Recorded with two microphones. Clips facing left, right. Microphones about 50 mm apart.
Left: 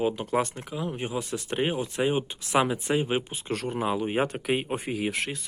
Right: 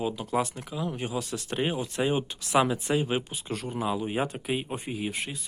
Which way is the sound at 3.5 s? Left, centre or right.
Left.